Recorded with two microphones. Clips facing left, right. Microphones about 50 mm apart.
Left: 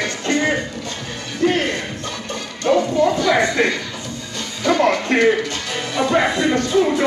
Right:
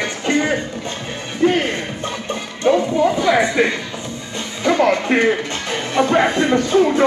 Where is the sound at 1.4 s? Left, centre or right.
Centre.